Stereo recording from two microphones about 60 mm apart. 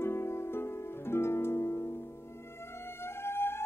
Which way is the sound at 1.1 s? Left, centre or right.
Left.